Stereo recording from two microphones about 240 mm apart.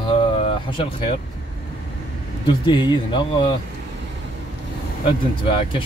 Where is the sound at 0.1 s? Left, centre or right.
Left.